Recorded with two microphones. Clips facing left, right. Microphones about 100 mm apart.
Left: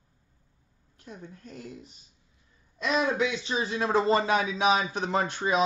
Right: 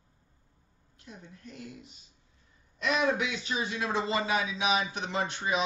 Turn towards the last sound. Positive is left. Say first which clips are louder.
# left 4 dB
turn(degrees=40)  # may be behind; listen again after turning